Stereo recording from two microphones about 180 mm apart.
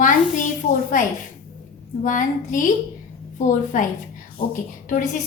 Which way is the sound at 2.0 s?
45° left (ahead or behind).